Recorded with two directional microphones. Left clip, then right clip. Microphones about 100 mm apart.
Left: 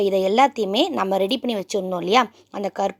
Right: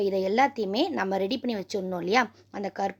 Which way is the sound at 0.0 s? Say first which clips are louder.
Left 7 dB; 50° left (ahead or behind).